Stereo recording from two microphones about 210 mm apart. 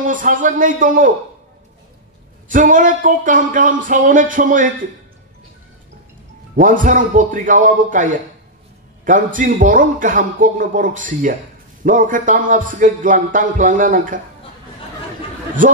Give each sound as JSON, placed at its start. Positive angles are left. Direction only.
{"t": 0.1, "sound": "music", "side_deg": -40}
{"t": 2.4, "sound": "music", "side_deg": -40}
{"t": 6.5, "sound": "music", "side_deg": -40}